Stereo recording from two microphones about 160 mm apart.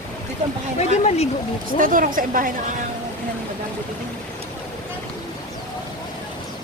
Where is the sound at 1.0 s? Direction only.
40° left (ahead or behind).